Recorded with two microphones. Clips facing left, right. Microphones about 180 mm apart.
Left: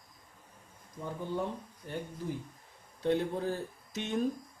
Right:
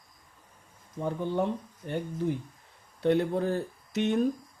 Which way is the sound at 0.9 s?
70° right (ahead or behind).